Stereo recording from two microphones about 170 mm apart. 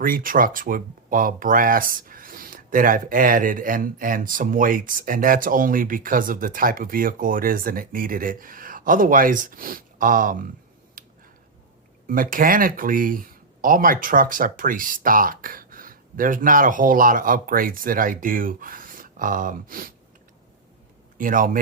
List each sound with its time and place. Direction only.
0.0 s speech: 55° right (ahead or behind)
11.0 s a sound: 55° right (ahead or behind)
12.0 s speech: 55° right (ahead or behind)
21.2 s speech: 55° right (ahead or behind)